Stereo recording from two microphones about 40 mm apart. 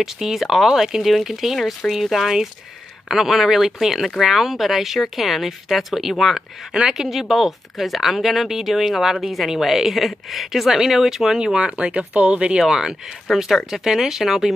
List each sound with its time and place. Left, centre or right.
0.0 s speech: centre
0.7 s speech: centre
6.7 s speech: centre
11.3 s speech: centre
11.8 s speech: right
12.5 s speech: centre